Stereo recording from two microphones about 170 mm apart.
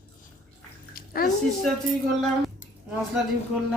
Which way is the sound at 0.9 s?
60° left (ahead or behind).